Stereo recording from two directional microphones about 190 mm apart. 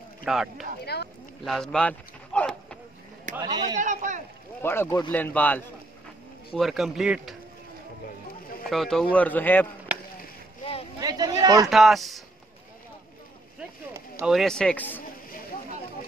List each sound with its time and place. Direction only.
0.2 s a man's voice: centre (ahead or behind)
0.9 s speech: 60° left (ahead or behind)
1.4 s a sound: centre (ahead or behind)
3.3 s speech: 20° right (ahead or behind)
3.7 s speech: 40° right (ahead or behind)
4.6 s a man's voice: 10° left (ahead or behind)
8.6 s a man's voice: centre (ahead or behind)
10.6 s vehicle: 30° left (ahead or behind)
11.0 s a sound: 20° right (ahead or behind)
11.4 s speech: 15° right (ahead or behind)
11.7 s a man's voice: centre (ahead or behind)
14.2 s a man's voice: centre (ahead or behind)